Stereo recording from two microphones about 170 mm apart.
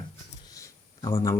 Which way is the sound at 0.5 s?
15° left (ahead or behind).